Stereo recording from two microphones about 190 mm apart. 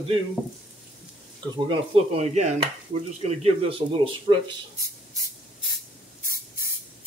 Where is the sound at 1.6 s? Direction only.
35° right (ahead or behind).